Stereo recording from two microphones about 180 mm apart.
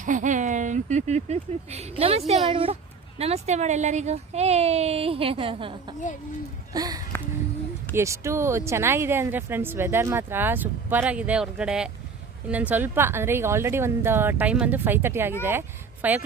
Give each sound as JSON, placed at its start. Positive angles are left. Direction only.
{"t": 0.0, "sound": "speech", "side_deg": -45}
{"t": 6.7, "sound": "speech", "side_deg": -20}